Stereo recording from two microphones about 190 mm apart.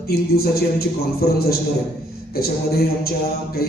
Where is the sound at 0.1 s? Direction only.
55° left (ahead or behind).